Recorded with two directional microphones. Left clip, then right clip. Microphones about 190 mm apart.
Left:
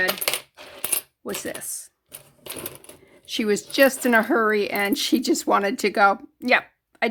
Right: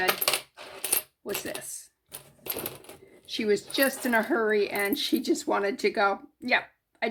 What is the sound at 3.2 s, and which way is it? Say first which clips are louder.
Speech: left 3 dB; 50° left (ahead or behind).